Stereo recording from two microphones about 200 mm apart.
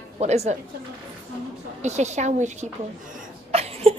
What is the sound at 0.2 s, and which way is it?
Speech, 35° right (ahead or behind).